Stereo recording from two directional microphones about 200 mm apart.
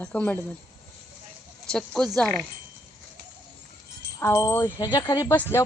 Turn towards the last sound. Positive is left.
turn(degrees=10)  # may be behind; listen again after turning